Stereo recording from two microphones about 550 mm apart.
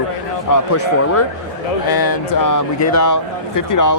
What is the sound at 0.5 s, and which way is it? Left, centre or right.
Speech, left.